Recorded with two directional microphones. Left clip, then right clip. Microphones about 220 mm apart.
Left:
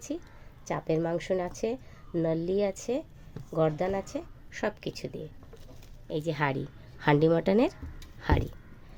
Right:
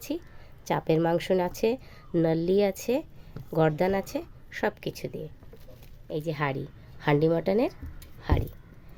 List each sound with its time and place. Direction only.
0.1 s speech: 25° right (ahead or behind)
6.1 s a woman's voice: centre (ahead or behind)